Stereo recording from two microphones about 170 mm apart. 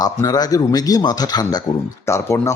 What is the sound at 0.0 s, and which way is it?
Speech, 25° left (ahead or behind).